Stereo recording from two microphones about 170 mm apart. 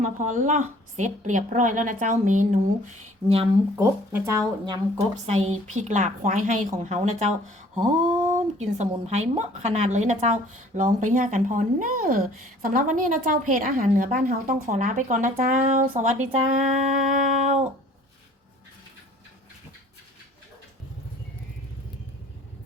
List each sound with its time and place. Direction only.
0.0 s a woman's voice: 50° right (ahead or behind)
3.2 s speech: 35° right (ahead or behind)
3.8 s speech: 15° right (ahead or behind)
4.9 s a woman's voice: 40° right (ahead or behind)